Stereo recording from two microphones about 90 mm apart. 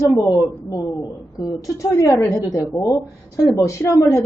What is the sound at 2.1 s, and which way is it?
A woman's voice, 30° left (ahead or behind).